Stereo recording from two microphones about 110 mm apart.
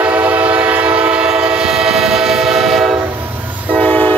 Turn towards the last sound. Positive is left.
turn(degrees=15)  # may be behind; listen again after turning